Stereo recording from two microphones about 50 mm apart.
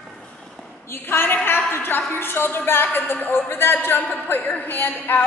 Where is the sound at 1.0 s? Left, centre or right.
Left.